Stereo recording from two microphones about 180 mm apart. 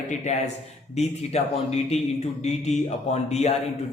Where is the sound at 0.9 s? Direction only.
35° left (ahead or behind).